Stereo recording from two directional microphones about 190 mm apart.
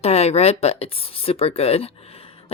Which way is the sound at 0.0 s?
35° left (ahead or behind).